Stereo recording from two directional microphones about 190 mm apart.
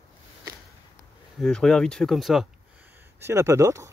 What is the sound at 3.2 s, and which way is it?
Speech, 15° right (ahead or behind).